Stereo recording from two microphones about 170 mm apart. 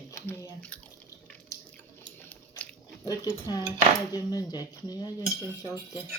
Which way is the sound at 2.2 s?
15° left (ahead or behind).